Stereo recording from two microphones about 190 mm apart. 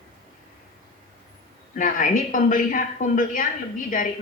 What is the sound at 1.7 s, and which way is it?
A woman's voice, 45° left (ahead or behind).